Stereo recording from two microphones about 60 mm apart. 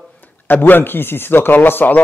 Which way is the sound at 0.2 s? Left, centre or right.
Left.